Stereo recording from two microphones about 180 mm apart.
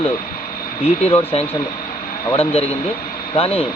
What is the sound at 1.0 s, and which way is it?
Speech, 35° left (ahead or behind).